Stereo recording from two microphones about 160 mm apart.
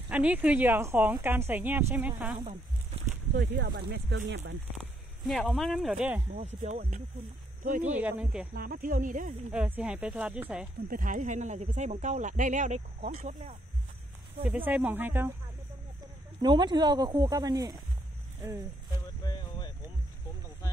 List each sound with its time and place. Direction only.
0.1 s speech: 10° right (ahead or behind)
3.3 s speech: 90° right
5.2 s speech: centre (ahead or behind)
6.3 s speech: 45° right (ahead or behind)
8.0 s speech: 10° right (ahead or behind)
8.5 s speech: 65° right (ahead or behind)
9.5 s speech: 10° right (ahead or behind)
10.9 s speech: 55° right (ahead or behind)
14.4 s speech: 10° right (ahead or behind)
16.0 s speech: 30° right (ahead or behind)
19.2 s a sound: 25° left (ahead or behind)